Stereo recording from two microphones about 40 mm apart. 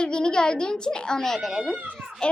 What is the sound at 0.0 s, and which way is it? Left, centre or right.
A child's voice, left.